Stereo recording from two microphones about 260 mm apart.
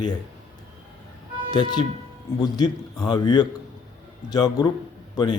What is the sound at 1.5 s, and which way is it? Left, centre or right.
A man's voice, centre.